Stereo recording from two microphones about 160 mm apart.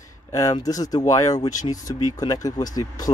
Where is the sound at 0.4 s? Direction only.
20° left (ahead or behind).